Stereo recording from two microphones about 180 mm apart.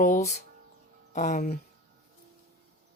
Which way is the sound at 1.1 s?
40° left (ahead or behind).